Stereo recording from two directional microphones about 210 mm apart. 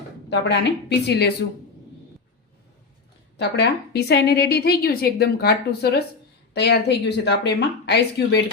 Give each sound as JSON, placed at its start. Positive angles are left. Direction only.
{"t": 0.3, "sound": "a woman's voice", "side_deg": 55}
{"t": 3.3, "sound": "a woman's voice", "side_deg": 55}